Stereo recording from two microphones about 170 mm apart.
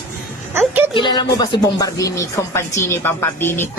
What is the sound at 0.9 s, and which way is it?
Speech, 30° left (ahead or behind).